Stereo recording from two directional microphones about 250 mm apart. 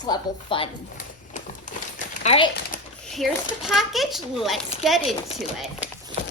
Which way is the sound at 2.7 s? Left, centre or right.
Left.